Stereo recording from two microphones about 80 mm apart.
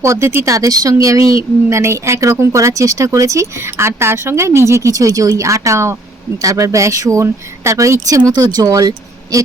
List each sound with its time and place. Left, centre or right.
0.0 s speech: right